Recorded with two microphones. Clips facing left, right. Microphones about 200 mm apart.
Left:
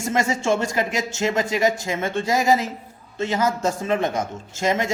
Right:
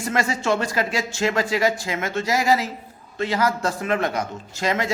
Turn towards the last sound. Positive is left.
turn(degrees=25)  # may be behind; listen again after turning